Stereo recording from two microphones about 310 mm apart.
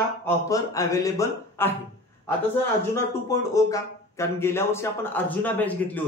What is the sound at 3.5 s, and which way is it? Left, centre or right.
Speech, centre.